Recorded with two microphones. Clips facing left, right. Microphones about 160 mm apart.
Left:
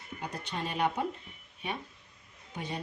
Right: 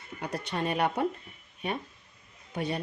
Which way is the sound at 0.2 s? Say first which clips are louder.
Right 5 dB; 65° right (ahead or behind).